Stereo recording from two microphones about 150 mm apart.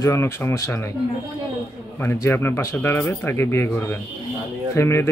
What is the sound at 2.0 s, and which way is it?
Speech, 15° left (ahead or behind).